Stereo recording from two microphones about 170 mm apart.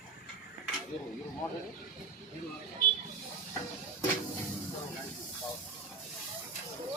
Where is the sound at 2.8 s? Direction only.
60° left (ahead or behind).